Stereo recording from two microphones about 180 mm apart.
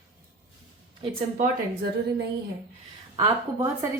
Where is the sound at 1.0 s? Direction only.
30° right (ahead or behind).